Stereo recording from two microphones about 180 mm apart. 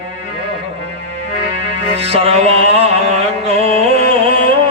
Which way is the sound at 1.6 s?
35° right (ahead or behind).